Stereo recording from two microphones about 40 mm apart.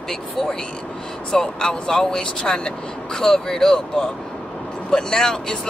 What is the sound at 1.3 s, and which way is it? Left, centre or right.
Speech, centre.